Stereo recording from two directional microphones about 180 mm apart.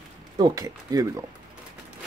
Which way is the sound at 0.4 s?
20° right (ahead or behind).